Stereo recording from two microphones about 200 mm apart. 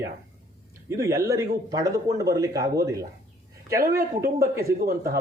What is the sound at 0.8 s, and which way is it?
Speech, 15° right (ahead or behind).